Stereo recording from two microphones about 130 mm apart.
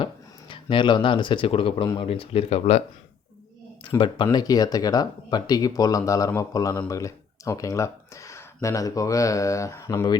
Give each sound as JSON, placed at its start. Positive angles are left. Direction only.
{"t": 0.0, "sound": "speech", "side_deg": 40}
{"t": 3.8, "sound": "speech", "side_deg": 40}